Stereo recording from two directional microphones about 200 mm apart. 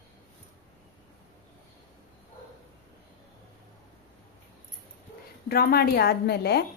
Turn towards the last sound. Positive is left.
turn(degrees=50)  # may be behind; listen again after turning